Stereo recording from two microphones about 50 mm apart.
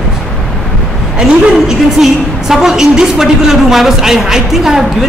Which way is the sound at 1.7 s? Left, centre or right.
Centre.